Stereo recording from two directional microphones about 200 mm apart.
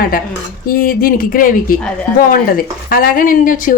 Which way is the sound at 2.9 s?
45° left (ahead or behind).